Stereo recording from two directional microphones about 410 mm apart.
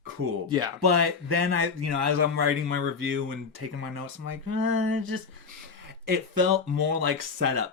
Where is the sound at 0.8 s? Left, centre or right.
Right.